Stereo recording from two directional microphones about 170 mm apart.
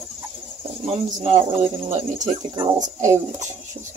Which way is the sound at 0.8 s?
35° right (ahead or behind).